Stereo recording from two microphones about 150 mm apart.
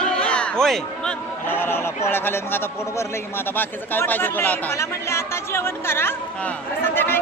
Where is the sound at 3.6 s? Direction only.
15° left (ahead or behind).